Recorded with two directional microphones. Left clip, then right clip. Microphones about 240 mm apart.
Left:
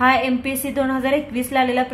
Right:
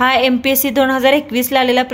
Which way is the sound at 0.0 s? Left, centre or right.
Right.